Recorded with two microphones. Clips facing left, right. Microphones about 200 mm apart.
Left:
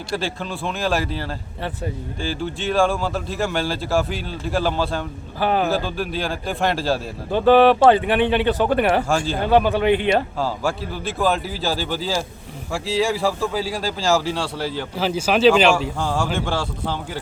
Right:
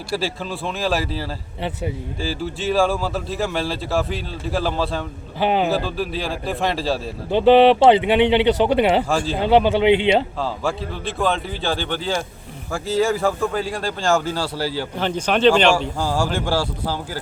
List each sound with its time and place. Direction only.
0.2 s speech: 5° right (ahead or behind)
5.4 s speech: 20° right (ahead or behind)
5.6 s speech: centre (ahead or behind)
7.3 s speech: 20° right (ahead or behind)
9.0 s speech: centre (ahead or behind)
9.4 s speech: 20° right (ahead or behind)
10.4 s speech: centre (ahead or behind)
16.0 s speech: 10° right (ahead or behind)